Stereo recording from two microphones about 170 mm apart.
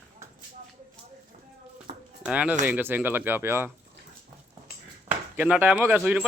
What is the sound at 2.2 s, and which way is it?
Speech, 5° right (ahead or behind).